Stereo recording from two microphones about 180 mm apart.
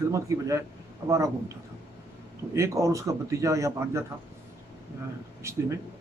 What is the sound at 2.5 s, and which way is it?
Speech, 15° right (ahead or behind).